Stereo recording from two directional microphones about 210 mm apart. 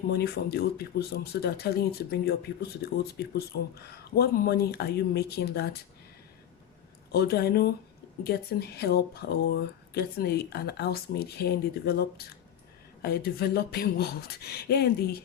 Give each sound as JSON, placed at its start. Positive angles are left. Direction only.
{"t": 0.1, "sound": "speech", "side_deg": 50}
{"t": 7.1, "sound": "speech", "side_deg": 50}